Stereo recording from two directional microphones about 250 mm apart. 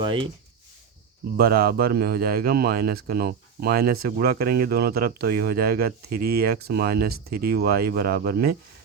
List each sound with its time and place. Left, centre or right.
0.0 s speech: centre
1.4 s speech: right